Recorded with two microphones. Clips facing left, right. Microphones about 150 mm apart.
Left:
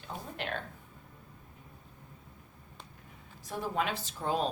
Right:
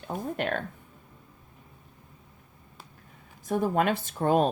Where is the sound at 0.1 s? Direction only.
50° right (ahead or behind).